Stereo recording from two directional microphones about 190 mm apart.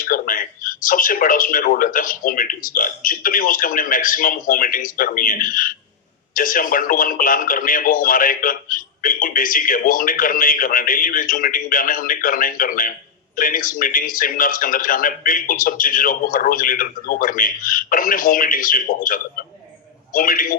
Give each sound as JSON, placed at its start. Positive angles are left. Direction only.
{"t": 0.0, "sound": "speech", "side_deg": 45}